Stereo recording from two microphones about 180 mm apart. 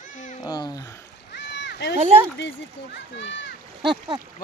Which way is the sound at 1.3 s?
75° left (ahead or behind).